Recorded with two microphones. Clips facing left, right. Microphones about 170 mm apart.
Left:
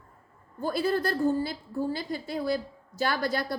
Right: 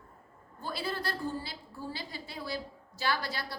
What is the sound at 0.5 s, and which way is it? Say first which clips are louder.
A woman's voice: left 9 dB; 45° left (ahead or behind).